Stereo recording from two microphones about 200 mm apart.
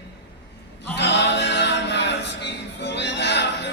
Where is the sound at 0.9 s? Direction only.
60° left (ahead or behind).